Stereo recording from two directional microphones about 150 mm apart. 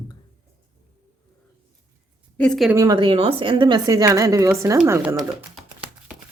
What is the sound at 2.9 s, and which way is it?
A woman's voice, 35° right (ahead or behind).